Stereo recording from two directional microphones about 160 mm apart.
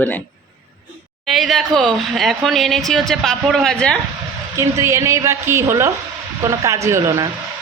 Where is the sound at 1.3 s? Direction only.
Centre (ahead or behind).